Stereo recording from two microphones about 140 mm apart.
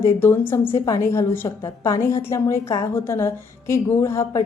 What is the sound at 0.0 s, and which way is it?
A woman's voice, 15° left (ahead or behind).